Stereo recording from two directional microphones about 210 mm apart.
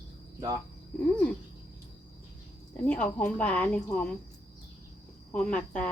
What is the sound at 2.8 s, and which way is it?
A woman's voice, 5° left (ahead or behind).